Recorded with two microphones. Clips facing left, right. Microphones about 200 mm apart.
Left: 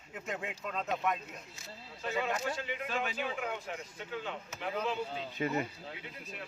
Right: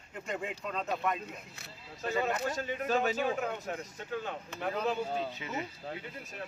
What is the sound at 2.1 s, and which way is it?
Speech, 40° right (ahead or behind).